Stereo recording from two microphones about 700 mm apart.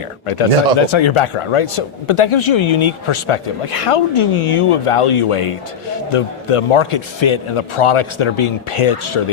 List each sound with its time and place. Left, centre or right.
0.3 s speech: left